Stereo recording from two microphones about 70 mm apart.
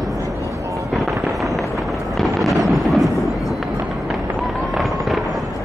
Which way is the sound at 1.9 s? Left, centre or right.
Centre.